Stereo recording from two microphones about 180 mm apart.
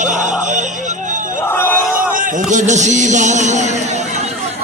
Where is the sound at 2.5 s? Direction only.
40° right (ahead or behind).